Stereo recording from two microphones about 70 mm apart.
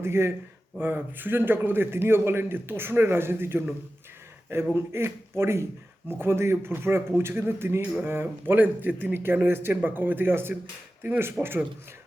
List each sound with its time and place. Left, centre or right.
0.0 s a man's voice: right
4.7 s a man's voice: right
11.4 s speech: centre